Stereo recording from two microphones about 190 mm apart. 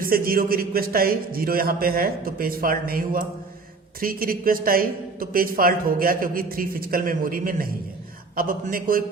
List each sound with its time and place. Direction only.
0.0 s a man's voice: 50° right (ahead or behind)